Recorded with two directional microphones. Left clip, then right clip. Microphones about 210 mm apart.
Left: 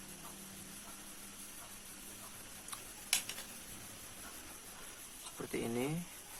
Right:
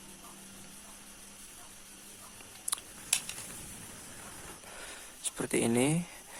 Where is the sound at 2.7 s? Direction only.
55° right (ahead or behind).